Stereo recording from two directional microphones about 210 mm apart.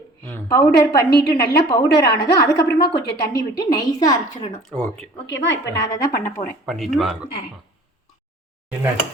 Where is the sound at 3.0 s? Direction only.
50° left (ahead or behind).